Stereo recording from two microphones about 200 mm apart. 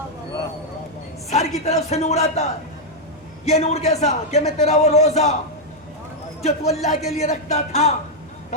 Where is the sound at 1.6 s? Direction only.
35° left (ahead or behind).